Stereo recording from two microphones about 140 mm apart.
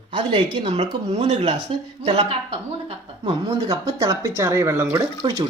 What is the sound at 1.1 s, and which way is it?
Speech, 50° right (ahead or behind).